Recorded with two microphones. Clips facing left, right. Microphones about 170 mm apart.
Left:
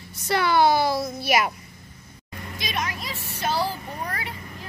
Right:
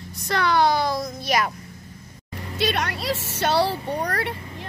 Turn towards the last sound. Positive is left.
turn(degrees=-70)  # may be behind; listen again after turning